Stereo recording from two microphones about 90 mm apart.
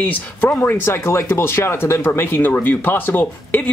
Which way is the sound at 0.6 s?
25° left (ahead or behind).